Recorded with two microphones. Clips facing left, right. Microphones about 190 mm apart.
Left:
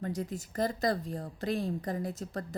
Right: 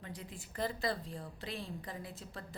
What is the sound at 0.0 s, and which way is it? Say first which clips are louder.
A woman's voice: left 12 dB; 45° left (ahead or behind).